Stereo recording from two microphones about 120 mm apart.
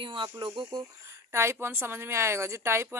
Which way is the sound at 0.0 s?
40° right (ahead or behind).